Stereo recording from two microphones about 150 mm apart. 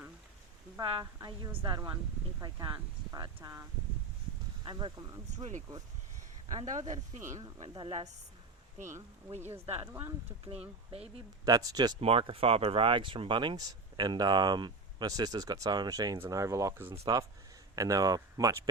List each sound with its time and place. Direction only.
0.8 s speech: 30° right (ahead or behind)
5.3 s speech: 55° right (ahead or behind)
7.7 s a woman's voice: 35° right (ahead or behind)
9.4 s speech: 15° right (ahead or behind)
10.4 s speech: 45° right (ahead or behind)
11.4 s speech: 25° right (ahead or behind)
11.9 s speech: 40° right (ahead or behind); by 18.7 s 25° right (ahead or behind)